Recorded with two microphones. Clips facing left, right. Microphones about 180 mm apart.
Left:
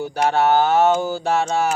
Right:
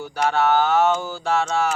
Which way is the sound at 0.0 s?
45° left (ahead or behind).